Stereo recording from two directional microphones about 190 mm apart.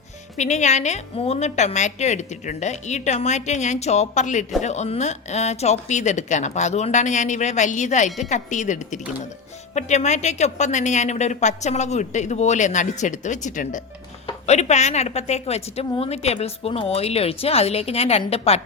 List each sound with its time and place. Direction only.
0.3 s a woman's voice: 35° left (ahead or behind)